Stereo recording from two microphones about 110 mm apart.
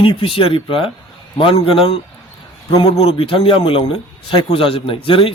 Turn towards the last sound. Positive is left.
turn(degrees=55)  # may be behind; listen again after turning